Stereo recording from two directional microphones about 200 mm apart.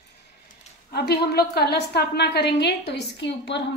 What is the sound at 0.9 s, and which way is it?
A woman's voice, 55° left (ahead or behind).